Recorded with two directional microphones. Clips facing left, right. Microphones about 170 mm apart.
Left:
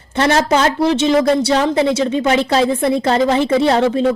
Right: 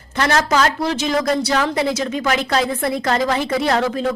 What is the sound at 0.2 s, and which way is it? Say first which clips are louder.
A woman's voice: left 3 dB; 25° left (ahead or behind).